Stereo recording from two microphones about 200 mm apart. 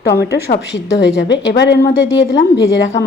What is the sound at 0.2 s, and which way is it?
A woman's voice, 55° left (ahead or behind).